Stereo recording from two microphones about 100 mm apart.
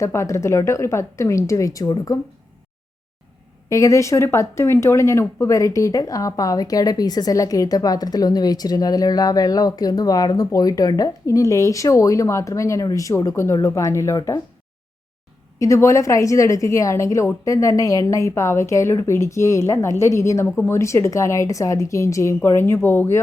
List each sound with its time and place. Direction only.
0.0 s a woman's voice: 30° left (ahead or behind)
3.7 s speech: 35° left (ahead or behind)
14.2 s speech: 40° left (ahead or behind)
15.5 s a woman's voice: 30° left (ahead or behind)